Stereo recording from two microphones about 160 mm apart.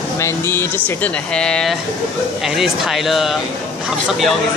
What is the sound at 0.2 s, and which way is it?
A woman's voice, 15° left (ahead or behind).